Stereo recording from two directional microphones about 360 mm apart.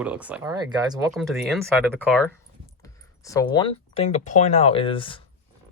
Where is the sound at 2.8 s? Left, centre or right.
Centre.